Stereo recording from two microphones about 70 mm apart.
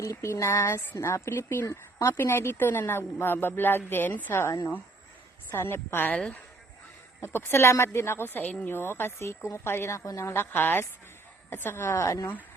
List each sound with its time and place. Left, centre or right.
0.0 s a sound: left
0.3 s speech: left
7.2 s speech: left
8.7 s speech: left
10.3 s speech: left